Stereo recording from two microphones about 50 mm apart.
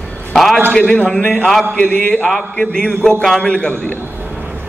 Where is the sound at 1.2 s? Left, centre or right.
Left.